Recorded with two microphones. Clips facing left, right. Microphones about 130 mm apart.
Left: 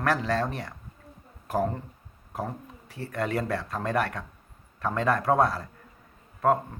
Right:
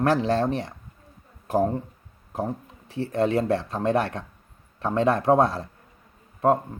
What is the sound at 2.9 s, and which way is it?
Speech, 25° right (ahead or behind).